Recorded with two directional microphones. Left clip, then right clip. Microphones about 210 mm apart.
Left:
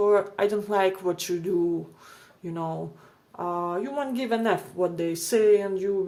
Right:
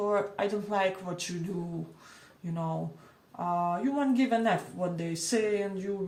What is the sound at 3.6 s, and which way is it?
Speech, 55° left (ahead or behind).